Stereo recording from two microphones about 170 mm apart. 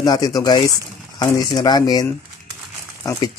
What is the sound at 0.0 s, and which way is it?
Speech, 25° left (ahead or behind).